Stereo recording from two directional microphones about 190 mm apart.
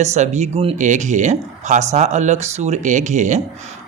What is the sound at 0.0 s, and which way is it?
A man's voice, 35° right (ahead or behind).